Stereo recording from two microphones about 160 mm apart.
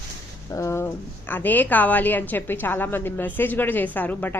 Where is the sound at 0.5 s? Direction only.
15° left (ahead or behind).